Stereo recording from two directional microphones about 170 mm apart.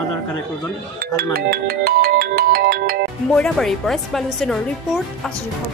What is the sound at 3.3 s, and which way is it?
A woman's voice, 5° left (ahead or behind).